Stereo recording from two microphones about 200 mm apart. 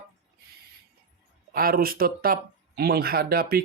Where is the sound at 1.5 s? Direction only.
45° right (ahead or behind).